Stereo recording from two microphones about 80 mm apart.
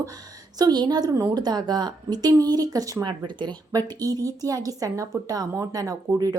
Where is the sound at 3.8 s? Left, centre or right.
Right.